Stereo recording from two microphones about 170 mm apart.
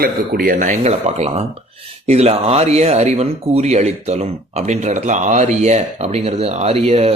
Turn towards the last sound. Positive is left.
turn(degrees=-35)  # may be behind; listen again after turning